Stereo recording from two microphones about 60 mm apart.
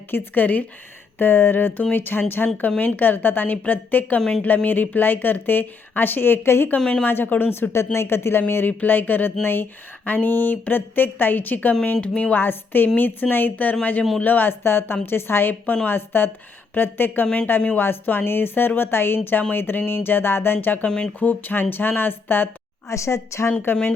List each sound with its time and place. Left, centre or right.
0.1 s a woman's voice: left
4.2 s a woman's voice: centre
4.4 s speech: left
6.7 s a woman's voice: centre
7.0 s a woman's voice: left
12.4 s a woman's voice: left
20.8 s a woman's voice: centre
21.2 s speech: left
22.9 s speech: left
23.7 s speech: left